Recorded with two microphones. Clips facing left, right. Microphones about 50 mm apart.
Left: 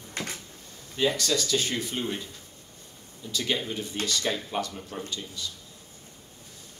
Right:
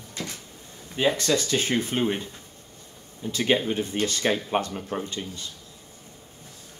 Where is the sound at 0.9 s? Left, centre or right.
Right.